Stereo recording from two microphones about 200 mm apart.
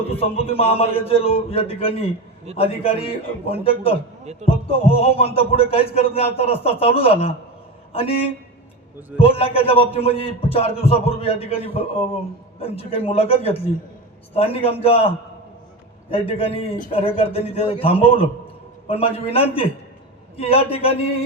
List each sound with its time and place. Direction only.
0.1 s a man's voice: 30° left (ahead or behind)
9.1 s a man's voice: 30° left (ahead or behind)